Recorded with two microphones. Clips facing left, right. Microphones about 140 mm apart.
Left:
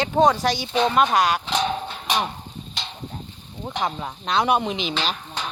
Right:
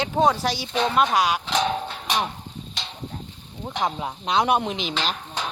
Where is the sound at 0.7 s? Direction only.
Centre (ahead or behind).